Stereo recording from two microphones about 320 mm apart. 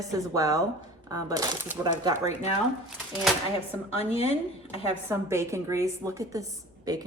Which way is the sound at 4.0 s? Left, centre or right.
Centre.